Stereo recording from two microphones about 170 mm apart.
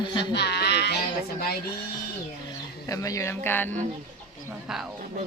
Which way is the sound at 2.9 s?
20° left (ahead or behind).